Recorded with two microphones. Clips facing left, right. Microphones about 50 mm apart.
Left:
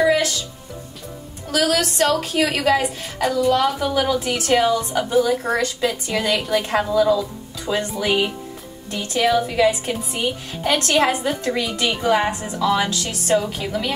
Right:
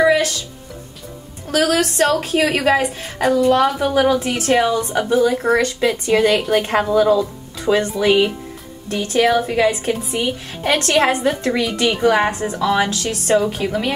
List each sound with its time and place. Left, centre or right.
0.0 s music: right
1.5 s a woman's voice: right
5.0 s speech: centre
5.6 s a woman's voice: right
12.6 s a woman's voice: right